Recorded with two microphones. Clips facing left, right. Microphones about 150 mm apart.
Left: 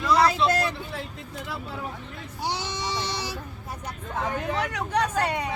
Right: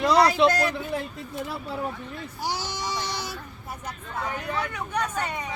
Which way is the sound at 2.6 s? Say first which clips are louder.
Left 1 dB; 25° left (ahead or behind).